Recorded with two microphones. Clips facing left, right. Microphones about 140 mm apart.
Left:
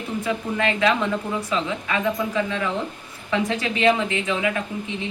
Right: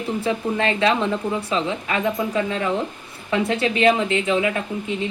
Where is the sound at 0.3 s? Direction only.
30° right (ahead or behind).